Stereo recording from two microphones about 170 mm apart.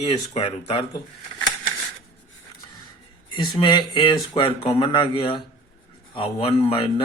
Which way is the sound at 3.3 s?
25° left (ahead or behind).